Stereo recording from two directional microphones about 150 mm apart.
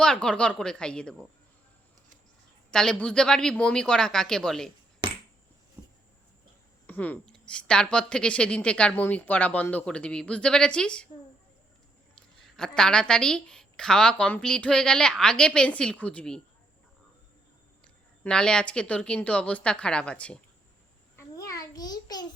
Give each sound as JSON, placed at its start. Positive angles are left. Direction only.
{"t": 0.0, "sound": "a woman's voice", "side_deg": 5}
{"t": 2.6, "sound": "a woman's voice", "side_deg": 5}
{"t": 5.0, "sound": "finger snapping", "side_deg": -30}
{"t": 6.8, "sound": "speech", "side_deg": 10}
{"t": 12.4, "sound": "a woman's voice", "side_deg": 5}
{"t": 17.8, "sound": "speech", "side_deg": 5}
{"t": 21.2, "sound": "a sound", "side_deg": 20}